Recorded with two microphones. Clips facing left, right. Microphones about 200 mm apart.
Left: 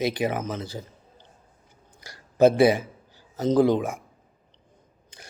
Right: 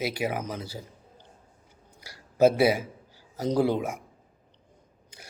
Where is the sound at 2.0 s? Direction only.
10° right (ahead or behind).